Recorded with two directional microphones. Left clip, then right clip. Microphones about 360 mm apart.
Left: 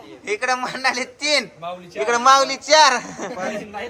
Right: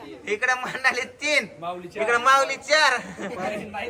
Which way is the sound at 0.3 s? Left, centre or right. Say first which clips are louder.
Left 2 dB; centre.